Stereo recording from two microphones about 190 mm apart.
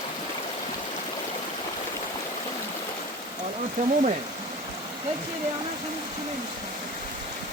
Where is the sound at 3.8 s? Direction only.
45° right (ahead or behind).